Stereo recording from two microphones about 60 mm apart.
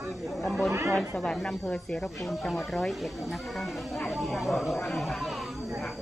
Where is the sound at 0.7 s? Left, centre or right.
Right.